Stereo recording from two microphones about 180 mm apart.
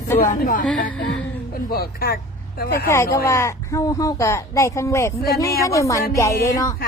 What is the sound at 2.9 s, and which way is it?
A woman's voice, 15° left (ahead or behind).